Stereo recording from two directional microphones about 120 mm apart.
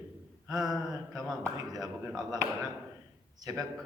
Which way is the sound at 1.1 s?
30° right (ahead or behind).